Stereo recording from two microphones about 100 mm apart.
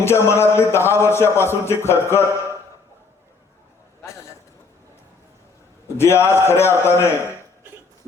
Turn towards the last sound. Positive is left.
turn(degrees=25)  # may be behind; listen again after turning